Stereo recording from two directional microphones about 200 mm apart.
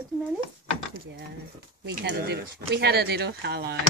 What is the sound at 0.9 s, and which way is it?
Speech, 50° right (ahead or behind).